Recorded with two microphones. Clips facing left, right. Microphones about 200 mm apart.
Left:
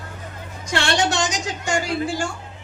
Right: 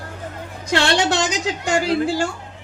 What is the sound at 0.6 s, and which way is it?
A woman's voice, 60° right (ahead or behind).